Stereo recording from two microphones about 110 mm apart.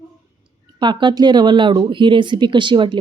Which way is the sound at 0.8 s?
45° right (ahead or behind).